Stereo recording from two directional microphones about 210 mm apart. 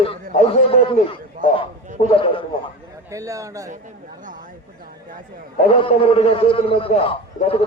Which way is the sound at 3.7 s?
40° right (ahead or behind).